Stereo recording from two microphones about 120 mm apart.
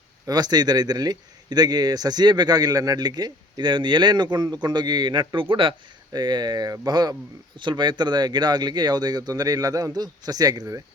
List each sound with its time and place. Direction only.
0.3 s a man's voice: 35° right (ahead or behind)